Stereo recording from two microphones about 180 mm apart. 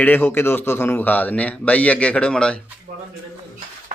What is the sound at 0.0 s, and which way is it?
A man's voice, 10° left (ahead or behind).